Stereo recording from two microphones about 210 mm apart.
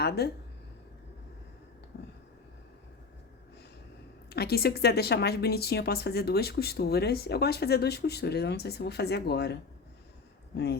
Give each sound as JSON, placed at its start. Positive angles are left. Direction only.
{"t": 0.2, "sound": "a woman's voice", "side_deg": 50}
{"t": 4.3, "sound": "a woman's voice", "side_deg": 50}